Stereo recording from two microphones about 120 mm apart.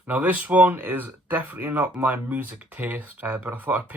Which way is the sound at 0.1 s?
15° right (ahead or behind).